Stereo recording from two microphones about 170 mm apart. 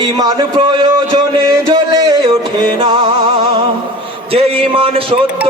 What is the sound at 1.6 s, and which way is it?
Music, 30° right (ahead or behind).